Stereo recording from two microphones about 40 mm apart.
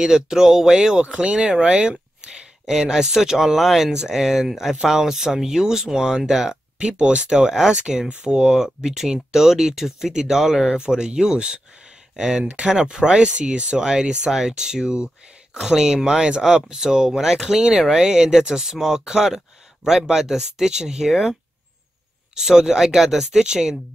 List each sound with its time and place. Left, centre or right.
0.0 s speech: centre
6.8 s speech: right; by 10.8 s centre
10.8 s speech: centre
13.7 s speech: centre
16.3 s speech: right
22.3 s speech: centre